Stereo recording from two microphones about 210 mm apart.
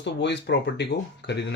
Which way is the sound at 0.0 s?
55° left (ahead or behind).